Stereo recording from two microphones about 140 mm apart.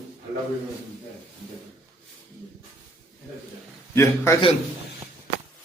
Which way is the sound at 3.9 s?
20° left (ahead or behind).